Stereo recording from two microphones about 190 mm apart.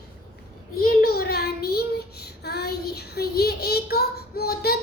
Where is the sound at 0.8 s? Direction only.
50° left (ahead or behind).